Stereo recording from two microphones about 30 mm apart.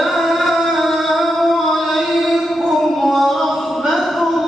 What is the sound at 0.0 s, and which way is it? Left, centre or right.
Music, centre.